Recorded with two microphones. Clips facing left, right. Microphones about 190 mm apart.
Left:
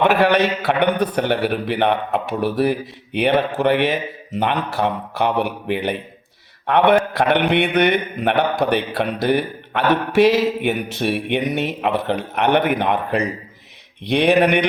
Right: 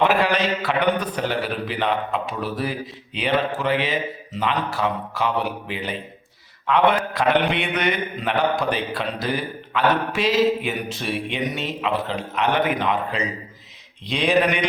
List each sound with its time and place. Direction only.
0.0 s a man's voice: 65° left (ahead or behind)